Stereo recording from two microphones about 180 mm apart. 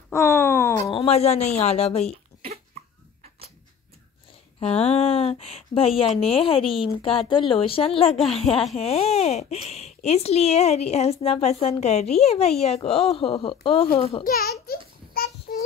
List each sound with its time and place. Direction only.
0.1 s a sound: 15° left (ahead or behind)
0.9 s speech: 35° left (ahead or behind)
4.6 s speech: 35° left (ahead or behind)
14.2 s a child's voice: 55° left (ahead or behind)
15.5 s child singing: 50° left (ahead or behind)